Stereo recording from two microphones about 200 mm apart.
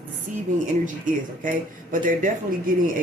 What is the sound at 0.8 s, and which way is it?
Speech, 40° right (ahead or behind).